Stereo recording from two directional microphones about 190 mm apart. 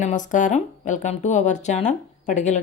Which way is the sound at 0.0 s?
40° left (ahead or behind).